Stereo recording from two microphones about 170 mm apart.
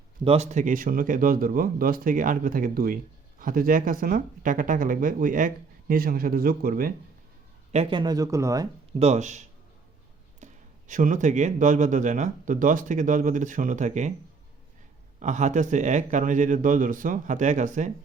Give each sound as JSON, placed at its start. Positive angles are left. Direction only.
{"t": 0.3, "sound": "a man's voice", "side_deg": -45}
{"t": 7.7, "sound": "speech", "side_deg": -35}
{"t": 9.0, "sound": "speech", "side_deg": -40}
{"t": 15.2, "sound": "speech", "side_deg": -45}